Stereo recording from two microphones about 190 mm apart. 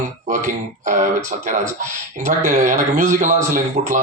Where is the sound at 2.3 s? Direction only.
40° right (ahead or behind).